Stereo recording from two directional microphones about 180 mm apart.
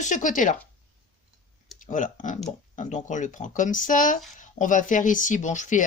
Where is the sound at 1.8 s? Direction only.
45° left (ahead or behind).